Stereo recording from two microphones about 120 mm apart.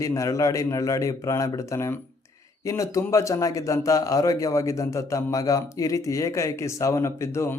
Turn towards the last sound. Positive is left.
turn(degrees=25)  # may be behind; listen again after turning